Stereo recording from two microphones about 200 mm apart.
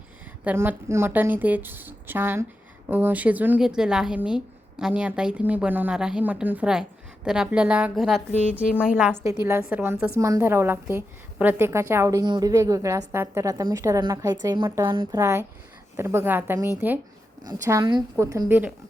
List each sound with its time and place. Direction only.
0.4 s a woman's voice: 10° right (ahead or behind)